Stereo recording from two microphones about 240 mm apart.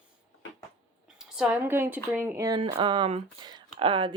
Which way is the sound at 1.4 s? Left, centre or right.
Centre.